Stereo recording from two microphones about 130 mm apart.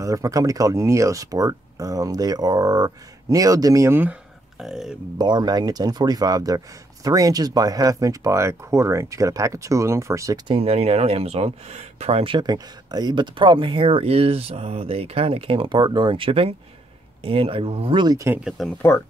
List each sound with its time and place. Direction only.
0.0 s speech: 25° right (ahead or behind)
4.6 s speech: 5° right (ahead or behind)
5.1 s speech: 35° right (ahead or behind)
10.5 s speech: 50° right (ahead or behind)
18.1 s speech: 20° right (ahead or behind)
18.4 s speech: centre (ahead or behind)